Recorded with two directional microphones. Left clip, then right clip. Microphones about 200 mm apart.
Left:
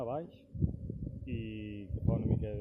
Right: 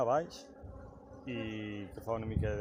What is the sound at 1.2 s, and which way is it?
Speech, 45° right (ahead or behind).